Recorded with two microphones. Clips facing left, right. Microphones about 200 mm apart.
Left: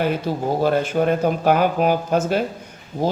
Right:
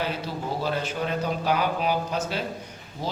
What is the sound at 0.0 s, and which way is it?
A man's voice, 55° left (ahead or behind).